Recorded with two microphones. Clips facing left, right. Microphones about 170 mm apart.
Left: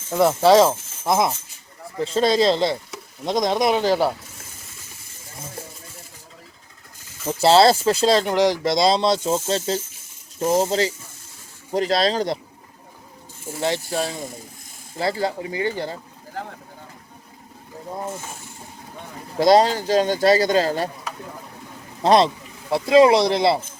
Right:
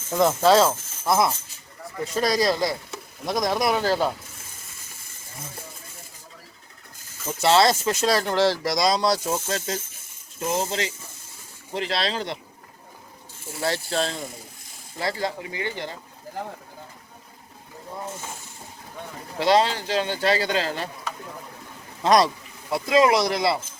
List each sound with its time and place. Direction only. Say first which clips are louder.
0.1 s speech: left 3 dB; 10° left (ahead or behind)
7.3 s speech: left 4 dB; 30° left (ahead or behind)
13.6 s speech: left 2 dB; 15° left (ahead or behind)
14.9 s speech: left 4 dB; 30° left (ahead or behind)
19.4 s speech: left 5 dB; 40° left (ahead or behind)
22.0 s speech: left 3 dB; 30° left (ahead or behind)